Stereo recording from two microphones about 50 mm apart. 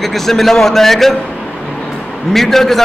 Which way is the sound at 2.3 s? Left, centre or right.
Centre.